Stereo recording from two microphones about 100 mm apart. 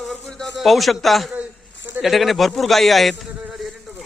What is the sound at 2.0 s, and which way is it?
Speech, centre (ahead or behind).